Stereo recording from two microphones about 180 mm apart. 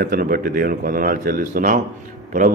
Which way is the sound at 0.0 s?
55° right (ahead or behind).